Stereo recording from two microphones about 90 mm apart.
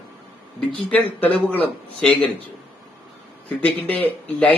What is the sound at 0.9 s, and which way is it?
Speech, 15° left (ahead or behind).